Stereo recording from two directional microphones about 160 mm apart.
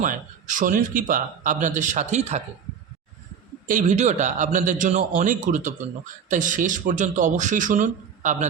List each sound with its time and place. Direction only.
0.0 s speech: 55° right (ahead or behind)
3.7 s speech: 50° right (ahead or behind)